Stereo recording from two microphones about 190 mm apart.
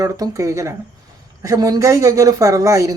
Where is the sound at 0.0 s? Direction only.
20° right (ahead or behind).